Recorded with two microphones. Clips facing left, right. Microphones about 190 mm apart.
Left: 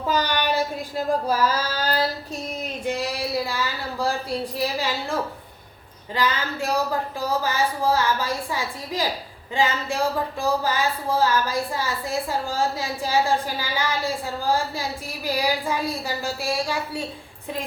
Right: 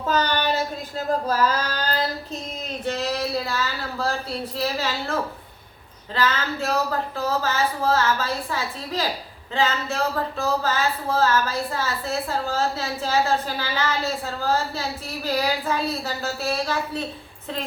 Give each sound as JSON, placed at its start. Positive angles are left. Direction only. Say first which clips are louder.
{"t": 0.1, "sound": "a sound", "louder": "right 1 dB", "side_deg": 10}
{"t": 2.8, "sound": "speech", "louder": "right 2 dB", "side_deg": 10}
{"t": 6.1, "sound": "speech", "louder": "right 1 dB", "side_deg": 15}